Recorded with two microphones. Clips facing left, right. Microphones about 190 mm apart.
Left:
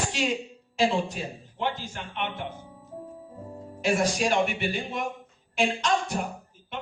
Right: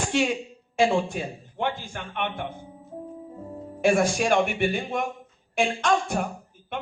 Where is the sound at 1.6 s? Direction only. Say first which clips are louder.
Right 2 dB; 55° right (ahead or behind).